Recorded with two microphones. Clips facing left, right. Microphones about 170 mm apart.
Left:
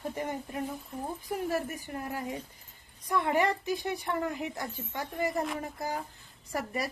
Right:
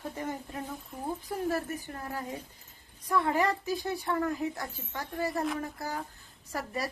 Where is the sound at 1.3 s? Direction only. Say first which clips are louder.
Left 1 dB; 10° left (ahead or behind).